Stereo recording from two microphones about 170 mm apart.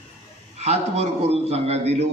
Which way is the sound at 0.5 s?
40° right (ahead or behind).